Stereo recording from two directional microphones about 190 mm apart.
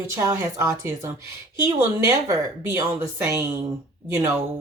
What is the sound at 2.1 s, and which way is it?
Speech, 20° right (ahead or behind).